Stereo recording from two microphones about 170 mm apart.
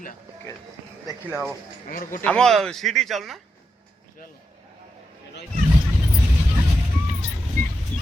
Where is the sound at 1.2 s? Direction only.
5° right (ahead or behind).